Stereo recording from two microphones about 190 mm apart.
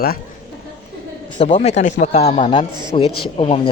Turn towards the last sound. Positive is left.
turn(degrees=30)  # may be behind; listen again after turning